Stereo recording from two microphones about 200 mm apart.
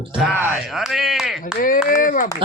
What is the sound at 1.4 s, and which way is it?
Speech, 45° left (ahead or behind).